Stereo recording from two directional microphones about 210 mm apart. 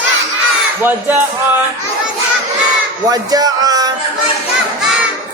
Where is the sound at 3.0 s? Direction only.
20° right (ahead or behind).